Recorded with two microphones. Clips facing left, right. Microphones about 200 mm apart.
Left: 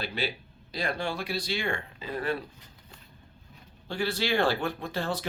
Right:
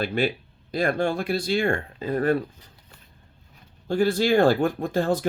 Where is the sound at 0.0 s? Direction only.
50° right (ahead or behind).